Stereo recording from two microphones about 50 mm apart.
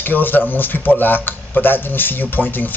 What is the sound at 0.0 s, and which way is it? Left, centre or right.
Speech, left.